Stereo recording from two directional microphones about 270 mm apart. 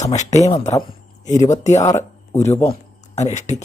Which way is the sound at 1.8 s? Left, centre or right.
Centre.